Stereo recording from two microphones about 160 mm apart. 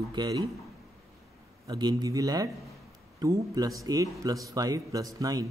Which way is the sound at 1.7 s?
25° right (ahead or behind).